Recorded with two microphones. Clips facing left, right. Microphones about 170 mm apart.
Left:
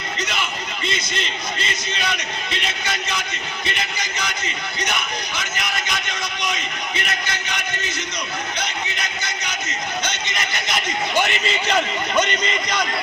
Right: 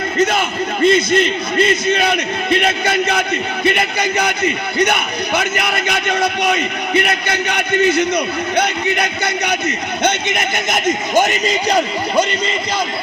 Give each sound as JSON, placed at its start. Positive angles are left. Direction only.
{"t": 0.2, "sound": "a man's voice", "side_deg": -50}